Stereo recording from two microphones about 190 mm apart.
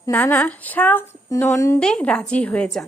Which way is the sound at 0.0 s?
10° left (ahead or behind).